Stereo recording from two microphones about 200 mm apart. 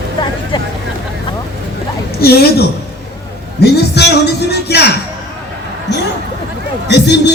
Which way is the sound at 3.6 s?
55° left (ahead or behind).